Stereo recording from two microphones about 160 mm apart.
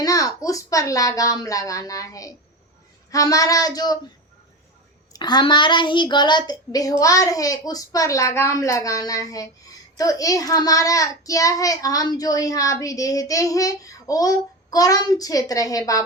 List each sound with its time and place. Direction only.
0.0 s child singing: 20° left (ahead or behind)
5.1 s child singing: 25° left (ahead or behind)